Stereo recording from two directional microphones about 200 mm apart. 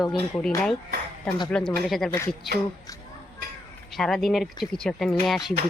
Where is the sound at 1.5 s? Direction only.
5° left (ahead or behind).